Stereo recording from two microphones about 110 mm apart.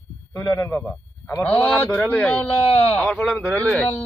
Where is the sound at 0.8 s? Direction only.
10° left (ahead or behind).